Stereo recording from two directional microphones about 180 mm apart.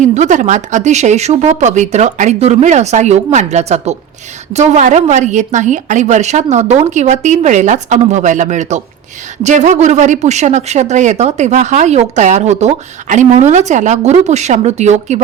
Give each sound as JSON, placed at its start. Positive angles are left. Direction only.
{"t": 0.0, "sound": "speech", "side_deg": -40}